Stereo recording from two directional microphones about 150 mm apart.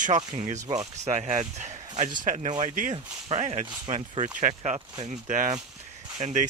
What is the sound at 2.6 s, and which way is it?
Speech, 55° right (ahead or behind).